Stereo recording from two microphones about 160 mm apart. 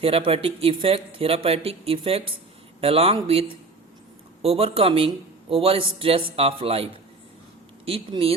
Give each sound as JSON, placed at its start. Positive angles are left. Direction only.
{"t": 0.0, "sound": "a man's voice", "side_deg": -35}